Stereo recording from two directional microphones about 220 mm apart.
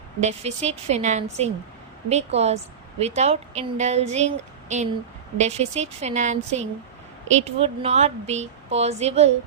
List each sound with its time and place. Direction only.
0.2 s speech: 30° right (ahead or behind)